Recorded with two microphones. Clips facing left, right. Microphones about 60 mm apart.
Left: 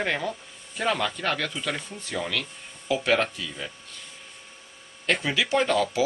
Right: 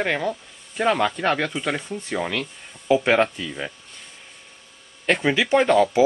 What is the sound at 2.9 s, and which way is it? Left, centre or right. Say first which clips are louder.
Speech: right 5 dB; right.